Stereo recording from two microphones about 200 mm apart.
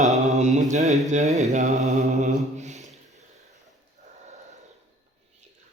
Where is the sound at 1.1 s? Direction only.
35° right (ahead or behind).